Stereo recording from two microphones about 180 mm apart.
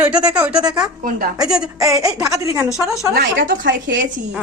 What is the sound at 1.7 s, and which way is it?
Speech, 20° right (ahead or behind).